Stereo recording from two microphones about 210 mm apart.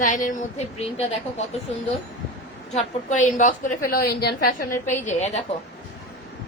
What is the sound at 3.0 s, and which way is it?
A woman's voice, 35° left (ahead or behind).